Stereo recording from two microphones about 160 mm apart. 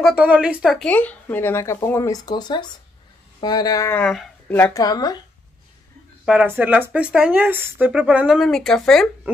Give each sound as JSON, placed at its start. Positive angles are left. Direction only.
{"t": 0.0, "sound": "speech", "side_deg": -5}
{"t": 3.9, "sound": "speech", "side_deg": 5}
{"t": 4.8, "sound": "speech", "side_deg": 25}
{"t": 6.2, "sound": "speech", "side_deg": -10}